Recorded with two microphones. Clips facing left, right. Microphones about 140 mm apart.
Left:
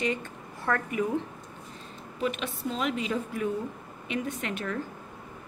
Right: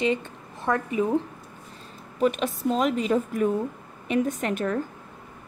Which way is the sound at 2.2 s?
40° right (ahead or behind).